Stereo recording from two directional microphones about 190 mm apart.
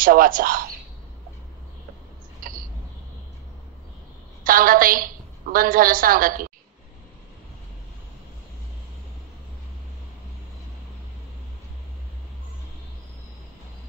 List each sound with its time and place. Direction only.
0.0 s speech: 50° right (ahead or behind)
4.5 s a woman's voice: 50° right (ahead or behind)